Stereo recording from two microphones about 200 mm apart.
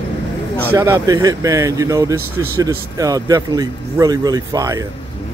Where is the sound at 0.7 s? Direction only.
15° right (ahead or behind).